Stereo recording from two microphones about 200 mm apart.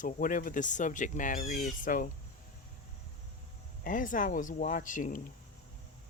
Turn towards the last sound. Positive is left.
turn(degrees=40)  # may be behind; listen again after turning